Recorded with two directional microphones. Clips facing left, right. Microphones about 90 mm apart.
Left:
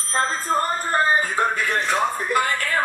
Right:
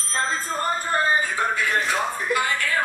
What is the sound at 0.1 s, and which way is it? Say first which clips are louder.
Speech: left 4 dB; 45° left (ahead or behind).